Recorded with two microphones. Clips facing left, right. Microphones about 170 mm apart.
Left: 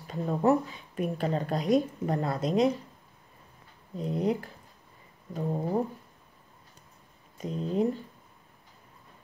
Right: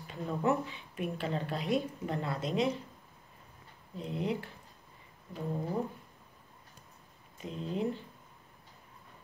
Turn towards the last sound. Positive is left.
turn(degrees=40)  # may be behind; listen again after turning